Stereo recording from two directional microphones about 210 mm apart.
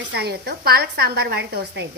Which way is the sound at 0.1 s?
50° right (ahead or behind).